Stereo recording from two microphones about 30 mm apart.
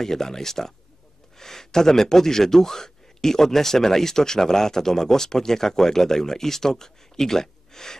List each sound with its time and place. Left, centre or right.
0.0 s speech: centre